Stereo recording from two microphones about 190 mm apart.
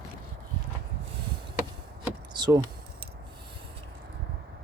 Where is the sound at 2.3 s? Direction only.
20° right (ahead or behind).